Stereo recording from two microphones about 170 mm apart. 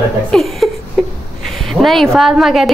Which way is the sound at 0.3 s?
Centre (ahead or behind).